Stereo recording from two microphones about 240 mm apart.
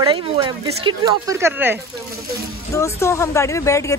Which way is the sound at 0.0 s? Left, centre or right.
Centre.